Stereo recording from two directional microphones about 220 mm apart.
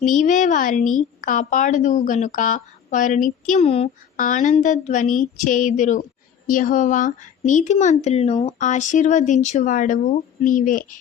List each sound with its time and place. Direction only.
0.0 s speech: 35° left (ahead or behind)